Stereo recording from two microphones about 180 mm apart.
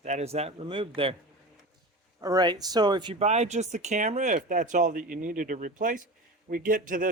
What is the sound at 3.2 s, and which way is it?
Speech, 40° right (ahead or behind).